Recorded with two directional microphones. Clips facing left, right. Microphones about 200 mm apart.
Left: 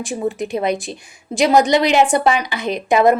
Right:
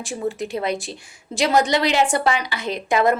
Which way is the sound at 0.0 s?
15° left (ahead or behind).